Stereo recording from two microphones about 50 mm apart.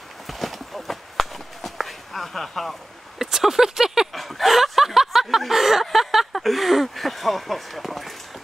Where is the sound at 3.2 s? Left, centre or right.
Centre.